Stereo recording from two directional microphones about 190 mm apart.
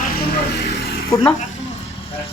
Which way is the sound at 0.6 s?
60° left (ahead or behind).